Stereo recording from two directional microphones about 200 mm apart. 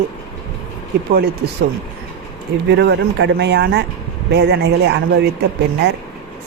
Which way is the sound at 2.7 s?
60° right (ahead or behind).